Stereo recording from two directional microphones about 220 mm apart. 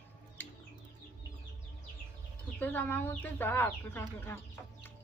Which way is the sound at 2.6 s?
10° left (ahead or behind).